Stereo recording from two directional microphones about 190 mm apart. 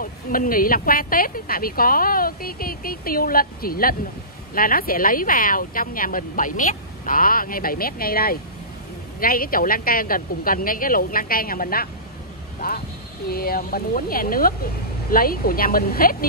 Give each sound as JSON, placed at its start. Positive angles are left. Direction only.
{"t": 0.0, "sound": "a woman's voice", "side_deg": 45}
{"t": 12.5, "sound": "vehicle", "side_deg": 50}
{"t": 13.3, "sound": "a woman's voice", "side_deg": 50}